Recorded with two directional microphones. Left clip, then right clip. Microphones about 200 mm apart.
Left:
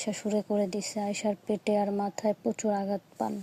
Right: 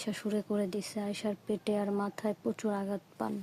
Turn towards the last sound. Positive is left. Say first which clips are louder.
# left 5 dB
turn(degrees=5)  # may be behind; listen again after turning